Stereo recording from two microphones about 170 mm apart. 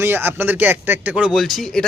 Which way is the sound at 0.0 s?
10° right (ahead or behind).